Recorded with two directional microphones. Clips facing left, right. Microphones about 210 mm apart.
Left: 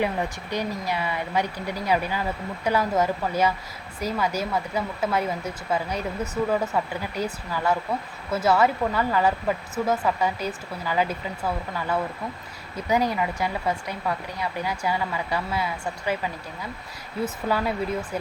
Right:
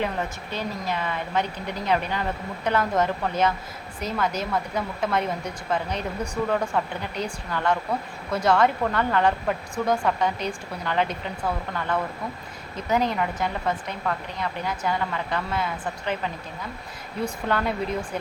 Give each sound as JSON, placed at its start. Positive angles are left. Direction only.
{"t": 0.0, "sound": "speech", "side_deg": 15}